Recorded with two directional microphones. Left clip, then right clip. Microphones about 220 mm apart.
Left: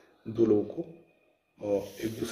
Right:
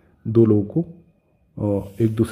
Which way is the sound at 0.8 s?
25° right (ahead or behind).